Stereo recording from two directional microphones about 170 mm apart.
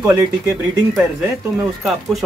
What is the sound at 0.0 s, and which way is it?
Speech, 20° right (ahead or behind).